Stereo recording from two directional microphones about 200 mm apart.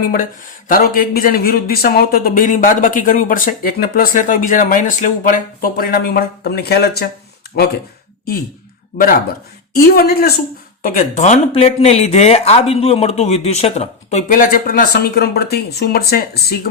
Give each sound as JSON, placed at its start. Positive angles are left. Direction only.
{"t": 0.0, "sound": "speech", "side_deg": 45}
{"t": 9.8, "sound": "speech", "side_deg": 50}
{"t": 10.8, "sound": "speech", "side_deg": 35}